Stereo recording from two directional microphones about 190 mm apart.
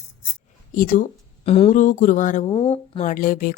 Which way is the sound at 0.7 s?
45° left (ahead or behind).